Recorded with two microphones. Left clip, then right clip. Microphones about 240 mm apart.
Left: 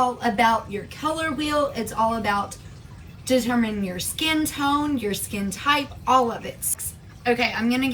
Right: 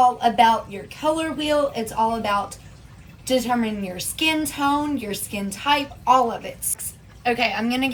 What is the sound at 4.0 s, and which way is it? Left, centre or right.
A woman's voice, centre.